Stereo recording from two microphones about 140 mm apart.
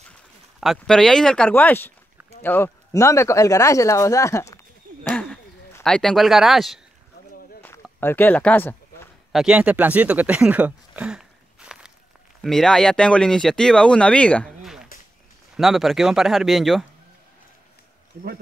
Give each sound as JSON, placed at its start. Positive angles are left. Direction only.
{"t": 0.6, "sound": "speech", "side_deg": 0}
{"t": 5.1, "sound": "a sound", "side_deg": 5}
{"t": 5.9, "sound": "speech", "side_deg": 5}
{"t": 8.0, "sound": "speech", "side_deg": 15}
{"t": 9.3, "sound": "speech", "side_deg": -5}
{"t": 14.6, "sound": "a sound", "side_deg": -5}
{"t": 15.5, "sound": "speech", "side_deg": 0}